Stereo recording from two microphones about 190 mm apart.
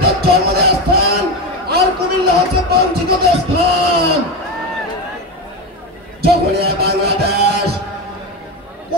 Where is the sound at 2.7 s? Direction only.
55° right (ahead or behind).